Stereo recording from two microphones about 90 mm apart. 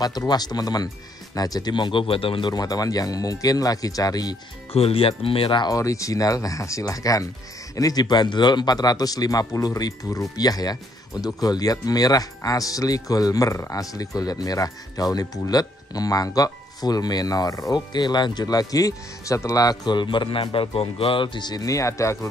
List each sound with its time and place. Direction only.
0.3 s speech: 50° left (ahead or behind); by 2.5 s 85° left
2.5 s speech: 45° left (ahead or behind)
4.7 s speech: 90° left; by 5.7 s 75° left (ahead or behind)
5.7 s speech: 40° left (ahead or behind)
17.7 s speech: 55° left (ahead or behind); by 22.3 s 35° left (ahead or behind)